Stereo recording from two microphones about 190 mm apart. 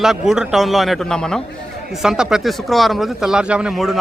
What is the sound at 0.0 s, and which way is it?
Speech, centre (ahead or behind).